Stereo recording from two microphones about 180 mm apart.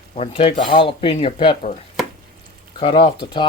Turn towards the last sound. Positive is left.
turn(degrees=30)  # may be behind; listen again after turning